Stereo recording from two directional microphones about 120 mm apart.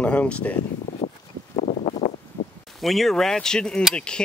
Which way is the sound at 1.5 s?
60° left (ahead or behind).